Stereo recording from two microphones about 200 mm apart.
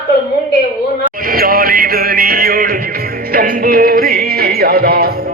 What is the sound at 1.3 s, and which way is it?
Music, 45° right (ahead or behind).